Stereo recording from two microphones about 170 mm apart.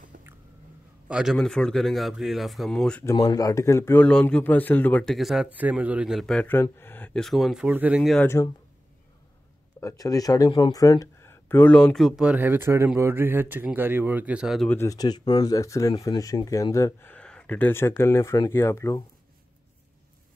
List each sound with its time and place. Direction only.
0.1 s a sound: 50° right (ahead or behind)
1.0 s speech: 5° right (ahead or behind)
3.1 s speech: 20° left (ahead or behind)
7.2 s speech: centre (ahead or behind)
9.8 s speech: 20° left (ahead or behind); by 14.7 s 5° right (ahead or behind)
14.7 s speech: 15° left (ahead or behind)